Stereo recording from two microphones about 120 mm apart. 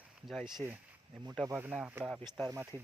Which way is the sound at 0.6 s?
20° right (ahead or behind).